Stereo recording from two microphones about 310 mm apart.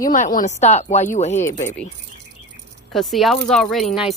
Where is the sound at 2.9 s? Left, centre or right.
Centre.